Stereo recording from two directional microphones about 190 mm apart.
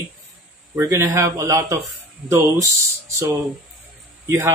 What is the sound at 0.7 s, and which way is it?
Speech, 15° right (ahead or behind).